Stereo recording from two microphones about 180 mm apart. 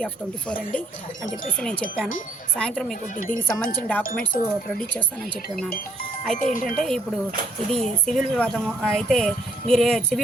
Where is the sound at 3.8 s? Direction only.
10° left (ahead or behind).